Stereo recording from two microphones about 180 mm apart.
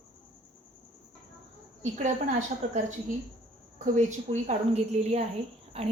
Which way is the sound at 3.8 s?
40° right (ahead or behind).